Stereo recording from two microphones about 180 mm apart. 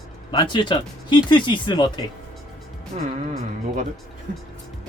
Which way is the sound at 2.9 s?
45° right (ahead or behind).